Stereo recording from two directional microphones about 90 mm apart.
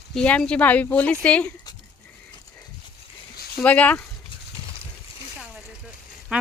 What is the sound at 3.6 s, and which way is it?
Speech, 15° left (ahead or behind).